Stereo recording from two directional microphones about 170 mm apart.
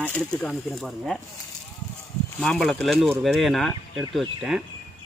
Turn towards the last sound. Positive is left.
turn(degrees=0)  # may be behind; listen again after turning